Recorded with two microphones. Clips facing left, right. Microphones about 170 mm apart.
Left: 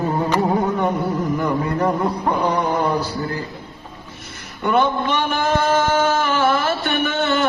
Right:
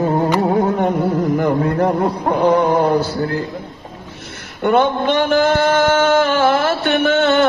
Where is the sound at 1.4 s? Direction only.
55° right (ahead or behind); by 2.7 s 70° right (ahead or behind).